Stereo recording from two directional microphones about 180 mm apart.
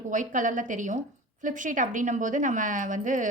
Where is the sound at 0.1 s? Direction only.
45° right (ahead or behind).